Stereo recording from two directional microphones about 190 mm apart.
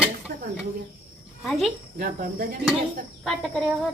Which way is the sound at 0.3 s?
55° right (ahead or behind).